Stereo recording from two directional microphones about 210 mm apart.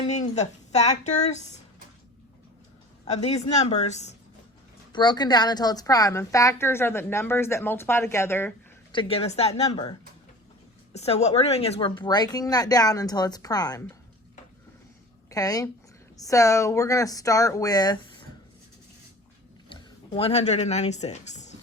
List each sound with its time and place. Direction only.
0.0 s speech: 30° left (ahead or behind)
3.2 s speech: 30° left (ahead or behind)
4.9 s a woman's voice: 20° left (ahead or behind)
8.9 s speech: 25° left (ahead or behind)
9.6 s speech: 20° left (ahead or behind)
10.9 s speech: 30° left (ahead or behind)
15.3 s a woman's voice: 15° left (ahead or behind)
19.6 s speech: 25° left (ahead or behind)